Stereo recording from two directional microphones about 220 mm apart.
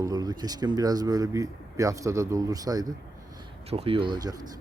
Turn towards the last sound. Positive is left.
turn(degrees=-20)  # may be behind; listen again after turning